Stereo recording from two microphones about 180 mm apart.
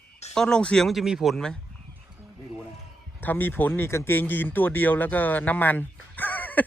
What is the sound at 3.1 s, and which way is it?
Speech, 10° left (ahead or behind).